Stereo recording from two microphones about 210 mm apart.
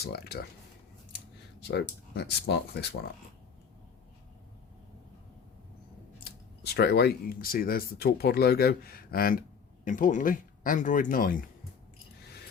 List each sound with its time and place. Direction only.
0.0 s speech: 50° left (ahead or behind)
1.6 s speech: 50° left (ahead or behind)
6.2 s speech: 50° left (ahead or behind)